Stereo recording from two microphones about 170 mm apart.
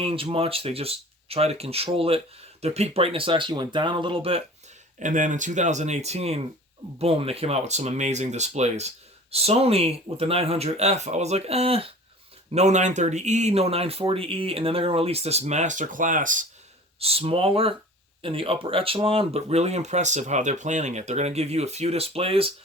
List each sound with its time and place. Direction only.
0.0 s speech: 30° right (ahead or behind)
4.9 s speech: 50° right (ahead or behind)
17.0 s speech: 35° right (ahead or behind)